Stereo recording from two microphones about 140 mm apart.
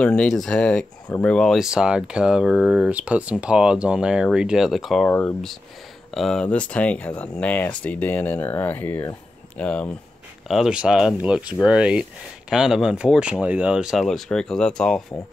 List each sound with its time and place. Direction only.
0.0 s speech: 10° left (ahead or behind)
10.5 s speech: 5° right (ahead or behind)